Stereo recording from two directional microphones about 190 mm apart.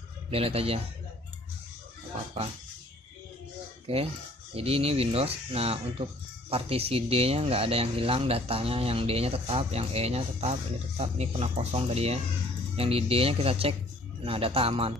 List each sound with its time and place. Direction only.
0.3 s speech: 30° right (ahead or behind)
3.8 s speech: 30° right (ahead or behind)